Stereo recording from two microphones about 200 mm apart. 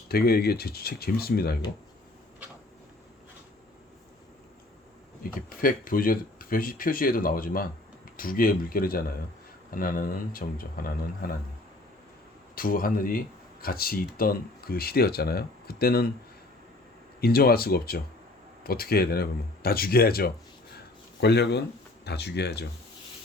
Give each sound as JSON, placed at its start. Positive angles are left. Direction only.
{"t": 0.1, "sound": "speech", "side_deg": 50}
{"t": 5.2, "sound": "speech", "side_deg": 45}
{"t": 12.5, "sound": "speech", "side_deg": 45}
{"t": 17.2, "sound": "speech", "side_deg": 50}
{"t": 20.7, "sound": "a sound", "side_deg": 55}
{"t": 22.0, "sound": "speech", "side_deg": 55}